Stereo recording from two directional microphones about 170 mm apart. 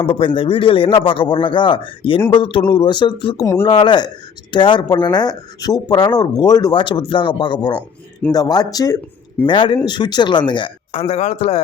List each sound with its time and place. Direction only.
0.0 s a man's voice: 30° left (ahead or behind)
11.1 s a man's voice: 40° left (ahead or behind)